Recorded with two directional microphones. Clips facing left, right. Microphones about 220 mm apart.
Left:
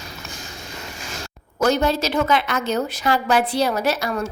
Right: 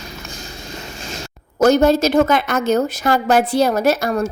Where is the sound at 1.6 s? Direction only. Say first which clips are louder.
Right 6 dB; 45° right (ahead or behind).